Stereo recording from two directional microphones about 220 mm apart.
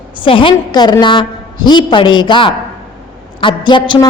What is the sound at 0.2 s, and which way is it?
A woman's voice, 25° left (ahead or behind).